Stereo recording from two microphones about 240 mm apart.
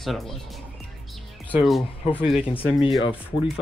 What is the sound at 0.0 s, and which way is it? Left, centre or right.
Speech, centre.